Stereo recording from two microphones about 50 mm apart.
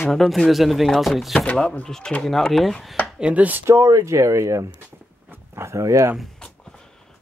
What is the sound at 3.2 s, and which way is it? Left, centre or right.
Speech, right.